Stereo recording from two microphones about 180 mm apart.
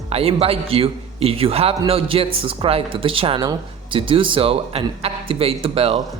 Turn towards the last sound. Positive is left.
turn(degrees=-30)  # may be behind; listen again after turning